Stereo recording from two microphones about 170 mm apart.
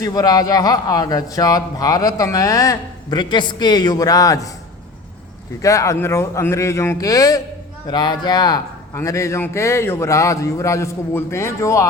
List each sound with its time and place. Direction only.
0.0 s a man's voice: 20° left (ahead or behind)
5.6 s a man's voice: 20° left (ahead or behind)